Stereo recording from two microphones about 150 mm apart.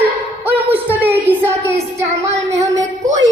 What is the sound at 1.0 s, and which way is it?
Child singing, 15° right (ahead or behind).